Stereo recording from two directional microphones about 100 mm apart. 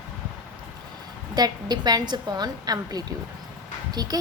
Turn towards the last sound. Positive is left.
turn(degrees=-40)  # may be behind; listen again after turning